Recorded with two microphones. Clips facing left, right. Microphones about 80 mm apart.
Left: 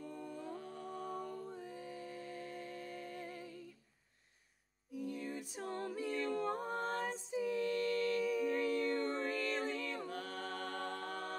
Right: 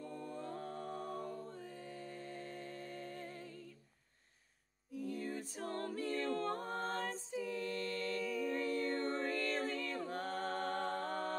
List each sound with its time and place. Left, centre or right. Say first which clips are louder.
0.0 s music: right 1 dB; centre
0.5 s music: right 2 dB; right
1.0 s music: even; centre
2.6 s music: left 1 dB; right
3.1 s music: left 1 dB; centre
4.9 s music: right 1 dB; centre
5.5 s a capella: even; centre
7.5 s a capella: left 5 dB; right
8.2 s a capella: left 3 dB; centre
9.0 s music: even; right
9.3 s music: even; centre
10.0 s a capella: right 3 dB; right